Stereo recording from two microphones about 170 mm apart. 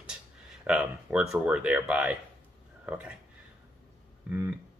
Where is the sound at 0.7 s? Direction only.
5° right (ahead or behind).